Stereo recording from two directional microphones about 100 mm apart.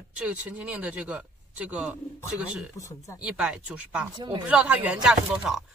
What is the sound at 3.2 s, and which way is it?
Speech, 10° right (ahead or behind).